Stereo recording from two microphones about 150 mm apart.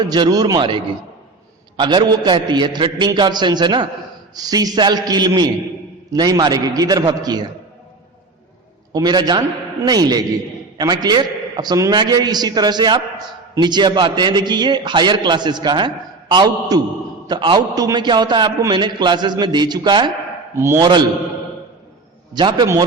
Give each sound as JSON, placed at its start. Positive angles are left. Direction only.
{"t": 0.0, "sound": "a man's voice", "side_deg": -25}
{"t": 8.9, "sound": "a man's voice", "side_deg": -25}
{"t": 22.3, "sound": "a man's voice", "side_deg": -30}